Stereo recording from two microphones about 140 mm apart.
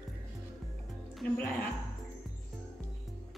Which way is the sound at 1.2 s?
5° left (ahead or behind).